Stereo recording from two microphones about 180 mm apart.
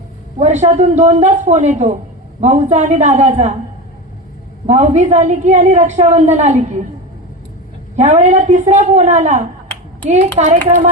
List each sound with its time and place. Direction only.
0.3 s a woman's voice: 40° right (ahead or behind)
4.6 s a woman's voice: 40° right (ahead or behind)
7.9 s a woman's voice: 40° right (ahead or behind)